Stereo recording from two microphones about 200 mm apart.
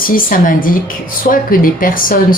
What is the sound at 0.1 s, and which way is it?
A woman's voice, 45° left (ahead or behind).